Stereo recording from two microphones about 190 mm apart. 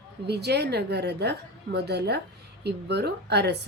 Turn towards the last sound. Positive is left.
turn(degrees=-60)  # may be behind; listen again after turning